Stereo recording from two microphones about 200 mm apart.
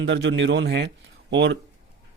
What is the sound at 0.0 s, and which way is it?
A man's voice, 60° right (ahead or behind).